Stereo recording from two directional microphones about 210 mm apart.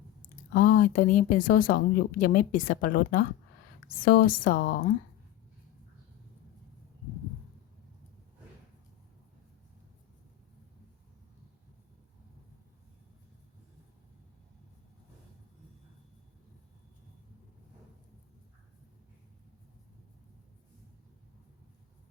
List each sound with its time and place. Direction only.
0.2 s speech: 40° left (ahead or behind)